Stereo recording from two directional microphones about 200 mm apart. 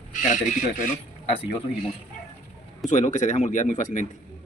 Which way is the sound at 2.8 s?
35° left (ahead or behind).